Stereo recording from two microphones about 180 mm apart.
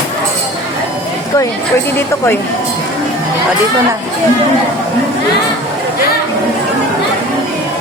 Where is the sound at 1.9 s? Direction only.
10° left (ahead or behind).